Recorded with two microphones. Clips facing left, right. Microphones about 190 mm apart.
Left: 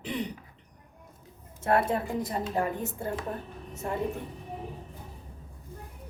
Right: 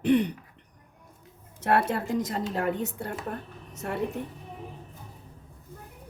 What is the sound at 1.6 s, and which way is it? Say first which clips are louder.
A woman's voice: right 1 dB; 75° right (ahead or behind).